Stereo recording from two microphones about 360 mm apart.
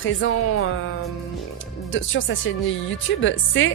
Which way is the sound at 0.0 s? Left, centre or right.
Left.